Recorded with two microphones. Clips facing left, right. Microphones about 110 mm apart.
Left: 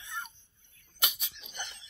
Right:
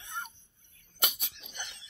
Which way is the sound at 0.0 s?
55° right (ahead or behind).